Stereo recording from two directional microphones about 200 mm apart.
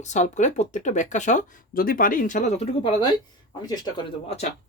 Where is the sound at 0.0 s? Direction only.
35° left (ahead or behind).